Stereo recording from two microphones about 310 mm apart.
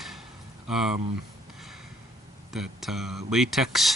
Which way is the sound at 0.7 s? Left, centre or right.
Centre.